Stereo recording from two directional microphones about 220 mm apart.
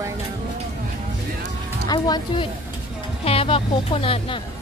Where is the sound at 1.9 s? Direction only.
20° left (ahead or behind).